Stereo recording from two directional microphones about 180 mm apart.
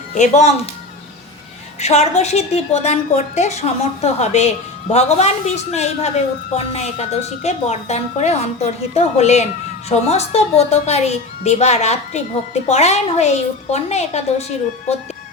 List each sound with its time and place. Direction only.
0.1 s a woman's voice: 40° left (ahead or behind)
1.8 s a woman's voice: 40° left (ahead or behind)